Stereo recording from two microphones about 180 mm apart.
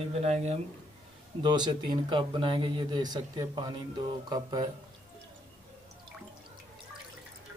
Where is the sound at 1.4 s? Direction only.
25° right (ahead or behind).